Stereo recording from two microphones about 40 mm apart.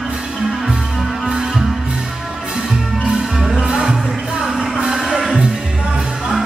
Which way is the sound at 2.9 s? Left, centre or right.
Right.